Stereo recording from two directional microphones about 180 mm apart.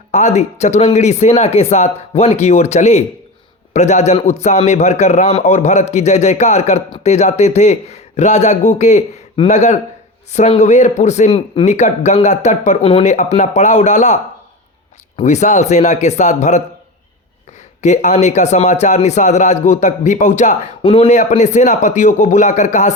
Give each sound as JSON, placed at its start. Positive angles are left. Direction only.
{"t": 0.1, "sound": "a man's voice", "side_deg": 40}
{"t": 17.8, "sound": "a man's voice", "side_deg": 40}
{"t": 20.8, "sound": "a man's voice", "side_deg": 30}